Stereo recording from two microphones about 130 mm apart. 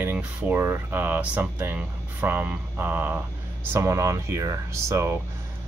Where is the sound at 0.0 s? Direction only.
10° right (ahead or behind).